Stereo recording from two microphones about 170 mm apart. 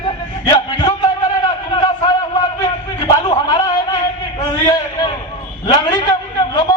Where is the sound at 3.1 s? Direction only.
25° left (ahead or behind).